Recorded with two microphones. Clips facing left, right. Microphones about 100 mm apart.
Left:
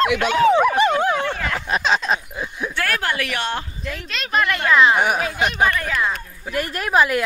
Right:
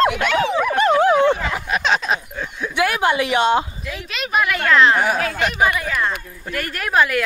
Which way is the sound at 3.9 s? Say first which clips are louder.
Right 1 dB; 5° right (ahead or behind).